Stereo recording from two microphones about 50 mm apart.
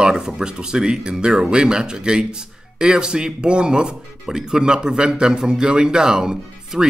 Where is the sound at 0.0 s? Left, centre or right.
Centre.